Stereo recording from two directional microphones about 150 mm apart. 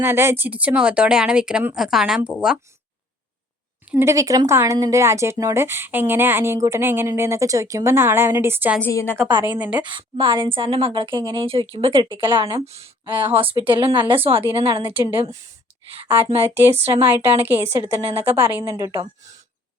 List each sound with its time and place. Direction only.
0.0 s speech: 15° right (ahead or behind)
3.9 s speech: 20° right (ahead or behind)
8.8 s a woman's voice: 15° left (ahead or behind)
9.2 s a woman's voice: 25° right (ahead or behind)
9.5 s speech: 10° right (ahead or behind)
9.7 s speech: 30° right (ahead or behind)
12.6 s speech: 45° right (ahead or behind)
17.1 s speech: 15° right (ahead or behind)
17.9 s speech: 40° right (ahead or behind)
18.3 s a woman's voice: 15° right (ahead or behind)